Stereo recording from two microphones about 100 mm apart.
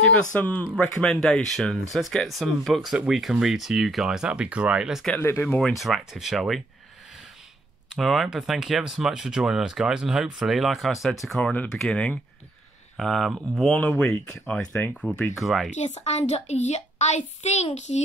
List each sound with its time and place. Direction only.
0.1 s speech: 15° left (ahead or behind); by 5.0 s 10° right (ahead or behind)
5.2 s speech: 25° left (ahead or behind)
5.6 s speech: centre (ahead or behind)
7.9 s speech: centre (ahead or behind)
11.5 s speech: 15° left (ahead or behind)
15.3 s speech: centre (ahead or behind)
15.9 s a woman's voice: 90° left